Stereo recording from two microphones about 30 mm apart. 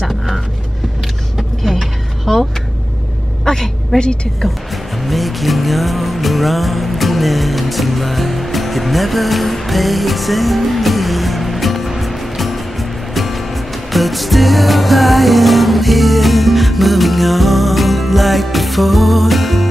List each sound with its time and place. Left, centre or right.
1.6 s vehicle: centre
3.4 s a woman's voice: centre
5.0 s music: centre